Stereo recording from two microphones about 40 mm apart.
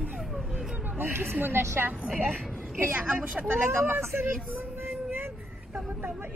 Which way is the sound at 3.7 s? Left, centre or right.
Right.